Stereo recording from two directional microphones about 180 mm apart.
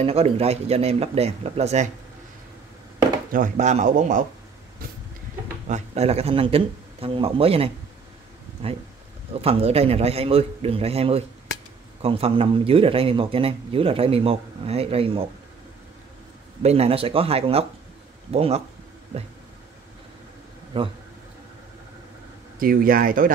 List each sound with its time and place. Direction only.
0.0 s speech: 35° right (ahead or behind)
3.3 s speech: 45° right (ahead or behind)
5.7 s speech: 35° right (ahead or behind)
16.6 s speech: 35° right (ahead or behind)
20.7 s speech: 30° right (ahead or behind)
22.6 s speech: 50° right (ahead or behind)